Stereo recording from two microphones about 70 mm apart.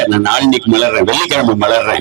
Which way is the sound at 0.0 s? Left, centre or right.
Right.